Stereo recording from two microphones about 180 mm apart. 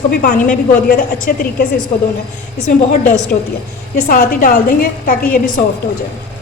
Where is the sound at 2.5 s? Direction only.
45° left (ahead or behind).